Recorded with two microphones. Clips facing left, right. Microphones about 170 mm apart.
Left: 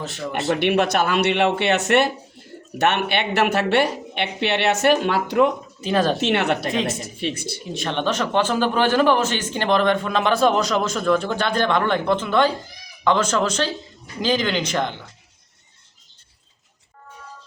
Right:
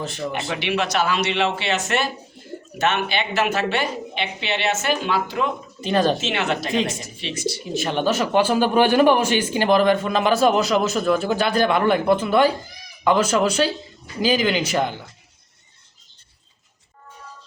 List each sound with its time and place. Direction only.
0.0 s speech: centre (ahead or behind)
0.5 s speech: 55° left (ahead or behind)
5.8 s speech: centre (ahead or behind)
6.1 s speech: 60° left (ahead or behind)
6.7 s speech: centre (ahead or behind)
7.2 s speech: 50° left (ahead or behind)
7.6 s speech: 5° right (ahead or behind)